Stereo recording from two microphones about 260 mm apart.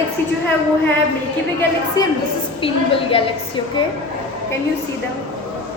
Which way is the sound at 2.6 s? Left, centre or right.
Left.